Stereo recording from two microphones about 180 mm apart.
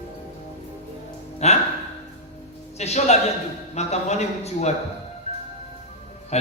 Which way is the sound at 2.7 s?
35° left (ahead or behind).